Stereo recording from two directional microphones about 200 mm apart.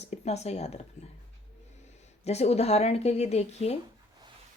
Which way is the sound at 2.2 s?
30° left (ahead or behind).